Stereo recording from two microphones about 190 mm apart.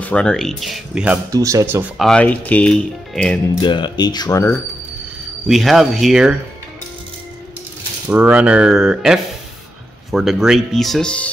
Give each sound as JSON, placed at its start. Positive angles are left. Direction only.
{"t": 0.0, "sound": "speech", "side_deg": 5}
{"t": 1.3, "sound": "speech", "side_deg": -15}
{"t": 2.0, "sound": "speech", "side_deg": 5}
{"t": 3.6, "sound": "speech", "side_deg": 25}
{"t": 5.5, "sound": "speech", "side_deg": 0}
{"t": 8.1, "sound": "speech", "side_deg": -10}